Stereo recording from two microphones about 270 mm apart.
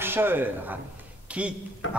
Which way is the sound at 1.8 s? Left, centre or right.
Left.